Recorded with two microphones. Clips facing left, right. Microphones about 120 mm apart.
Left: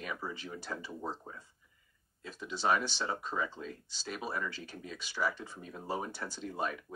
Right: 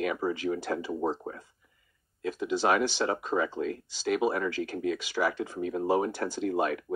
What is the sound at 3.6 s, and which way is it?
Speech, 75° right (ahead or behind).